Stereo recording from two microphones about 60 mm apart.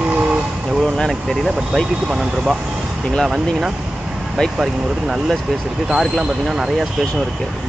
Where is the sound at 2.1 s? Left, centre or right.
Centre.